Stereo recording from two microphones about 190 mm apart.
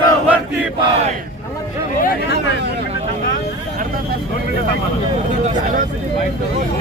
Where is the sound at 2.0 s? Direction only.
50° left (ahead or behind).